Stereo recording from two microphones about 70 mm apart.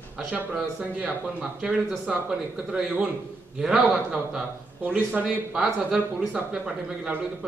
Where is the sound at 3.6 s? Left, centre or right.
Centre.